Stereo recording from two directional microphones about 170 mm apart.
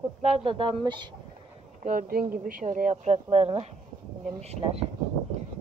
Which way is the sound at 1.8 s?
55° right (ahead or behind).